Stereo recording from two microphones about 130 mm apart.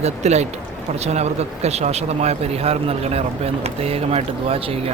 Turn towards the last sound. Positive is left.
turn(degrees=-50)  # may be behind; listen again after turning